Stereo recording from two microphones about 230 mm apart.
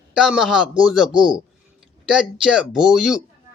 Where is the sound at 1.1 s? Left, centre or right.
Right.